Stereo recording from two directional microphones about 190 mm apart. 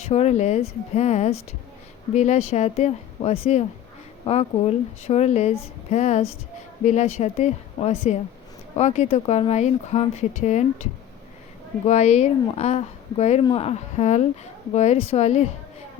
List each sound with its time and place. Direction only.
0.0 s speech: 35° left (ahead or behind)
11.9 s speech: 35° left (ahead or behind)